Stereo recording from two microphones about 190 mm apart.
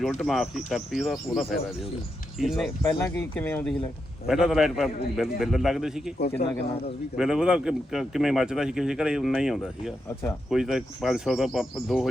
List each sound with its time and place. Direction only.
0.0 s a man's voice: centre (ahead or behind)
3.0 s speech: 10° left (ahead or behind)
4.3 s a man's voice: 5° right (ahead or behind)
6.4 s speech: 35° left (ahead or behind)
7.2 s a man's voice: 5° right (ahead or behind)